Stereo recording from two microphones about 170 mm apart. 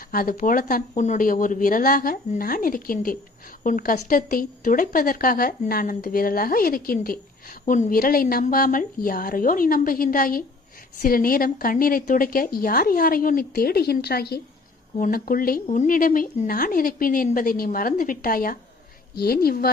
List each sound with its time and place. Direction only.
0.1 s speech: 55° left (ahead or behind)
7.6 s speech: 45° left (ahead or behind); by 14.4 s 65° left (ahead or behind)
14.9 s speech: 55° left (ahead or behind)
15.6 s speech: 45° left (ahead or behind); by 19.7 s 60° left (ahead or behind)